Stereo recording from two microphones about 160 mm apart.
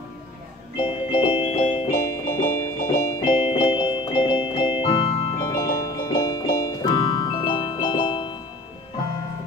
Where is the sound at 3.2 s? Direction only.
35° left (ahead or behind).